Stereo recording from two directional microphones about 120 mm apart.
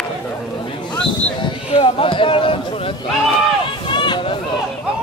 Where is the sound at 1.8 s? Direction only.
45° left (ahead or behind).